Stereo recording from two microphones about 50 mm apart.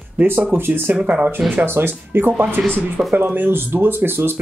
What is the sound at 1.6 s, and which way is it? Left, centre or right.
Speech, right.